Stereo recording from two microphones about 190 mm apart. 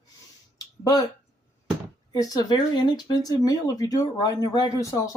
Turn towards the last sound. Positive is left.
turn(degrees=15)  # may be behind; listen again after turning